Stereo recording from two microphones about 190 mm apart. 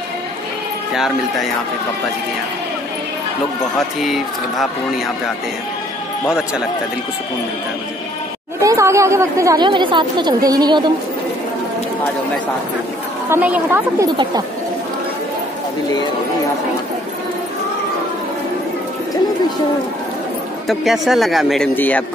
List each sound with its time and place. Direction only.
0.9 s speech: centre (ahead or behind)
3.7 s speech: centre (ahead or behind)
8.5 s speech: 15° right (ahead or behind)
13.3 s a woman's voice: 10° right (ahead or behind)
20.6 s a man's voice: centre (ahead or behind)